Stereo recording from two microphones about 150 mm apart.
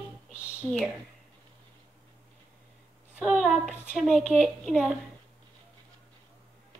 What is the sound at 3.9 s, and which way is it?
A woman's voice, 5° right (ahead or behind).